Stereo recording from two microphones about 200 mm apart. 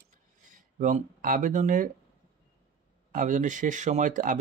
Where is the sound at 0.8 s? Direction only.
40° right (ahead or behind).